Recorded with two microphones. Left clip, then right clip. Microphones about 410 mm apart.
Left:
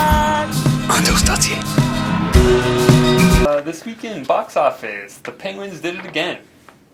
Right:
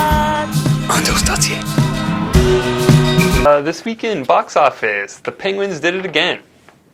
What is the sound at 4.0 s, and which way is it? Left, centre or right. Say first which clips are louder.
Speech: right 4 dB; right.